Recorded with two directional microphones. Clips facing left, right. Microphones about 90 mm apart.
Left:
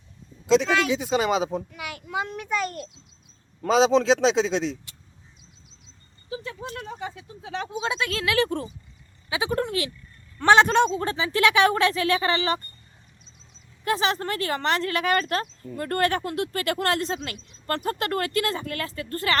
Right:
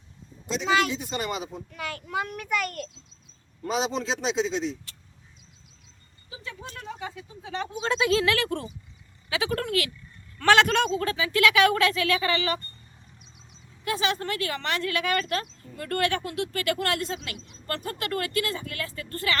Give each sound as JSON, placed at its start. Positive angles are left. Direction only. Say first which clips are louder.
{"t": 0.5, "sound": "a man's voice", "louder": "left 4 dB", "side_deg": 90}
{"t": 1.7, "sound": "a child's voice", "louder": "even", "side_deg": 15}
{"t": 3.6, "sound": "a man's voice", "louder": "left 9 dB", "side_deg": 90}
{"t": 7.0, "sound": "speech", "louder": "left 2 dB", "side_deg": 0}
{"t": 8.4, "sound": "a child's voice", "louder": "left 5 dB", "side_deg": 20}
{"t": 13.8, "sound": "speech", "louder": "left 3 dB", "side_deg": 40}